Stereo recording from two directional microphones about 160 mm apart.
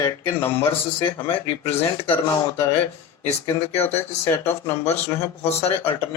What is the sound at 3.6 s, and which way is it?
Speech, 15° left (ahead or behind).